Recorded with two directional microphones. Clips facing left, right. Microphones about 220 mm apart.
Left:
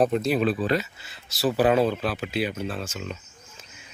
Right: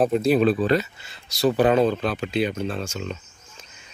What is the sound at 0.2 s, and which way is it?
Speech, 30° right (ahead or behind).